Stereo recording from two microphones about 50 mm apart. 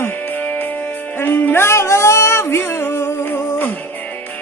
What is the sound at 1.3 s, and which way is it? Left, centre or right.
Music, left.